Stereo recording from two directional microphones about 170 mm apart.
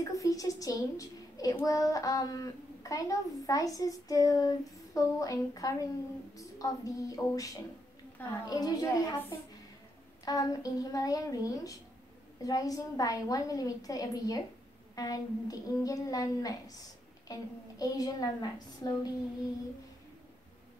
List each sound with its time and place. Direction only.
0.0 s a child's voice: 20° left (ahead or behind)